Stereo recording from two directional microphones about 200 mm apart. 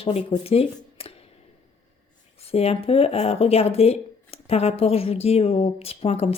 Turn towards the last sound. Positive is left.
turn(degrees=30)  # may be behind; listen again after turning